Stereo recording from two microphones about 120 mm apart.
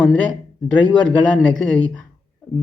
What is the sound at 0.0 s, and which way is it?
A man's voice, 10° left (ahead or behind).